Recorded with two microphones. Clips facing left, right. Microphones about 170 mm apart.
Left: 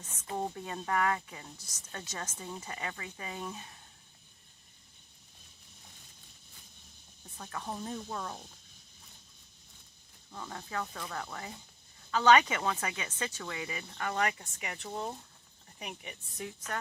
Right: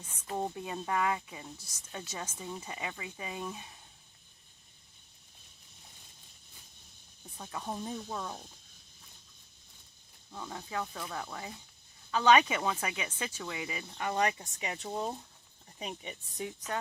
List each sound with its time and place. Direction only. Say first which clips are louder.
0.0 s speech: right 1 dB; 10° right (ahead or behind)
7.3 s speech: right 1 dB; 10° right (ahead or behind)
10.3 s a woman's voice: right 1 dB; 5° right (ahead or behind); by 16.7 s 25° right (ahead or behind)